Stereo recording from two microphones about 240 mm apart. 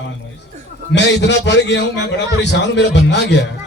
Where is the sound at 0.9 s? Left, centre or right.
Left.